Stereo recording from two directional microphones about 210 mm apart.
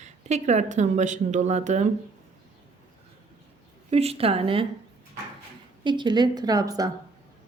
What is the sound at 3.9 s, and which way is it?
Speech, 30° right (ahead or behind).